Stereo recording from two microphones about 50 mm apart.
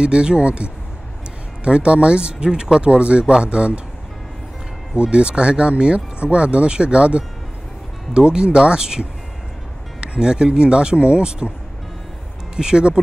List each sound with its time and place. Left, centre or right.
0.0 s speech: centre
4.9 s speech: right
12.5 s speech: centre